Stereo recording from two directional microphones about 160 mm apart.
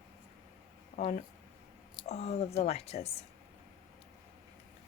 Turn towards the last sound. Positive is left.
turn(degrees=40)  # may be behind; listen again after turning